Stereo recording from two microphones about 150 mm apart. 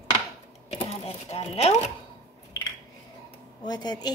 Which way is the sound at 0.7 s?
45° left (ahead or behind).